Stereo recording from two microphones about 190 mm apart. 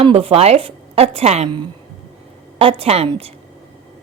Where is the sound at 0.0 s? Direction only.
30° right (ahead or behind).